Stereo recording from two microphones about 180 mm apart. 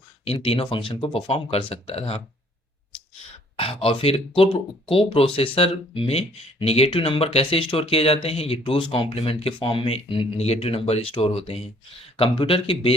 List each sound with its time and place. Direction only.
0.3 s speech: 30° left (ahead or behind)
3.6 s speech: 30° left (ahead or behind)